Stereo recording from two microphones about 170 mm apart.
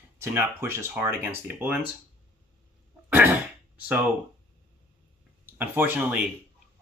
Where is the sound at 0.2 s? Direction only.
15° right (ahead or behind).